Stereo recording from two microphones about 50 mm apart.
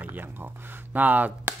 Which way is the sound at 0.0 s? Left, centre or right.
Right.